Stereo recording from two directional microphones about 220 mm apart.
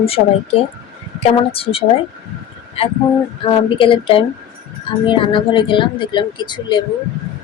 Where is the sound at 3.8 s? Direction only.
25° left (ahead or behind).